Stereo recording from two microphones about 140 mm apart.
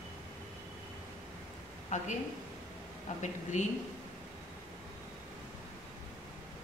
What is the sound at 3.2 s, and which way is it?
Speech, 60° left (ahead or behind).